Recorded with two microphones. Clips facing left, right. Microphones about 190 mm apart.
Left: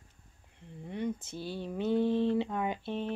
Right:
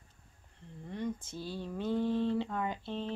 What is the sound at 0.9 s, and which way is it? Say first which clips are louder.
Speech: left 2 dB; 15° left (ahead or behind).